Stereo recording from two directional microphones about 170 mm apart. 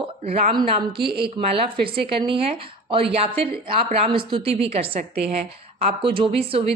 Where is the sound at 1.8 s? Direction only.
30° right (ahead or behind).